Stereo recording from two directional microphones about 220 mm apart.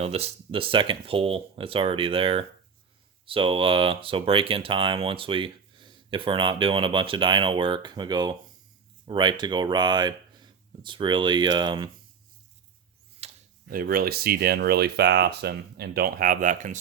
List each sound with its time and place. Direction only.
0.0 s speech: 25° right (ahead or behind)
13.2 s tick-tock: 30° right (ahead or behind)
13.7 s speech: 40° right (ahead or behind)